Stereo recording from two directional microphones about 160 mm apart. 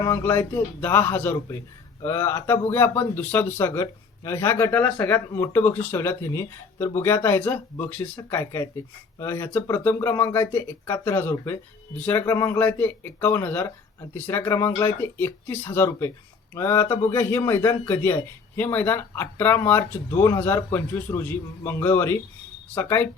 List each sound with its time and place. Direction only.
0.0 s speech: 15° left (ahead or behind)